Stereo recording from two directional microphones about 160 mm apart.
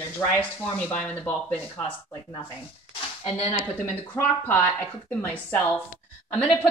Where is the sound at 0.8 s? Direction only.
10° left (ahead or behind).